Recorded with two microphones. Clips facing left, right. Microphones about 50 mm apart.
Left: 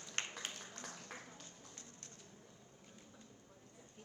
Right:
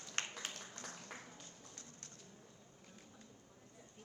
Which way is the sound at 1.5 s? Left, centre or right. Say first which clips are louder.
Even; left.